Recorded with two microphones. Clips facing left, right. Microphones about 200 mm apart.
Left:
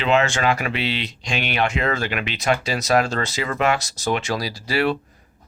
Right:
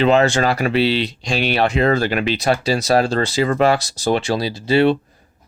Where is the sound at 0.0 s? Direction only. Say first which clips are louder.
Right 5 dB; 35° right (ahead or behind).